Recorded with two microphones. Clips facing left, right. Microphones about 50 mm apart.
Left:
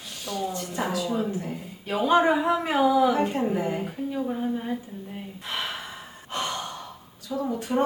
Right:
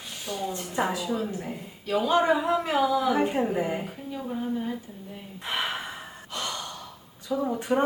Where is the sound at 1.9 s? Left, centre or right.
Left.